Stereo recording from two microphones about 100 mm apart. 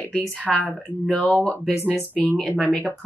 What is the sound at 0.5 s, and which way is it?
Speech, centre (ahead or behind).